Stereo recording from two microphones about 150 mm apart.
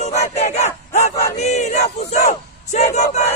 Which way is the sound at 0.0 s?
45° left (ahead or behind).